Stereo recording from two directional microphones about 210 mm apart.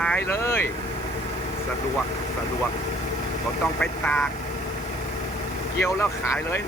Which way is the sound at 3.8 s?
5° left (ahead or behind).